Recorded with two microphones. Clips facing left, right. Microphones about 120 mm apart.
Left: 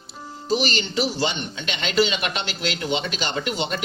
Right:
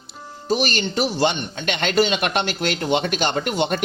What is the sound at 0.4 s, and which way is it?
Speech, 50° right (ahead or behind).